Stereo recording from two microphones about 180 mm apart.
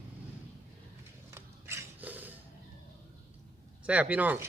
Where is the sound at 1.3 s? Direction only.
15° right (ahead or behind).